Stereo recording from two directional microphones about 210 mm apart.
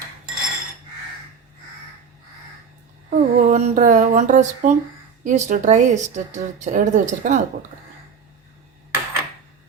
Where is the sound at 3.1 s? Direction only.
35° right (ahead or behind).